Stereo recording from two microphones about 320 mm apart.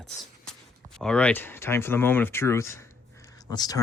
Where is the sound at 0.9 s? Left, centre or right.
Centre.